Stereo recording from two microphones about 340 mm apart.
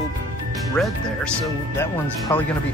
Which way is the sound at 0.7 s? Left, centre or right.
Centre.